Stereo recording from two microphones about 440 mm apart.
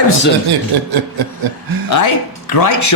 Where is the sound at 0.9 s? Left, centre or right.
Right.